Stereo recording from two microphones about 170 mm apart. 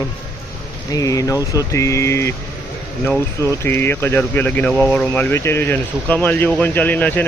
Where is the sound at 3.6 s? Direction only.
15° left (ahead or behind).